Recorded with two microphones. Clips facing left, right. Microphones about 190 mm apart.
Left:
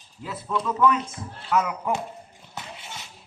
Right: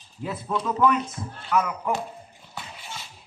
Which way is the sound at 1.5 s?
20° left (ahead or behind).